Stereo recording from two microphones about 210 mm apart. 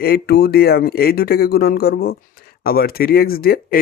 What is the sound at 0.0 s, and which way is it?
Speech, 50° left (ahead or behind).